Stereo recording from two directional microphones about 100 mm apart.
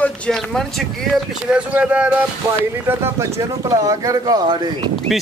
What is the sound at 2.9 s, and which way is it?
Speech, 25° right (ahead or behind).